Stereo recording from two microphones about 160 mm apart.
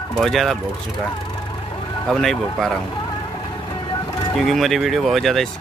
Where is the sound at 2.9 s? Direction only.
25° left (ahead or behind).